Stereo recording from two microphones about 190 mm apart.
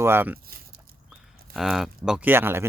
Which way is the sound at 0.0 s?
10° right (ahead or behind).